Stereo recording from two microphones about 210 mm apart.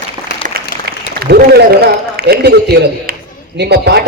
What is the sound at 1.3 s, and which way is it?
A man's voice, 45° right (ahead or behind).